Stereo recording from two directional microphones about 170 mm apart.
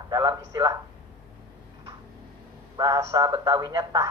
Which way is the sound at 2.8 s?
20° right (ahead or behind).